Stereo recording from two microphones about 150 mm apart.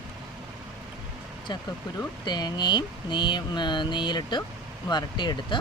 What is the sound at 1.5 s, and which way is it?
Speech, 30° left (ahead or behind).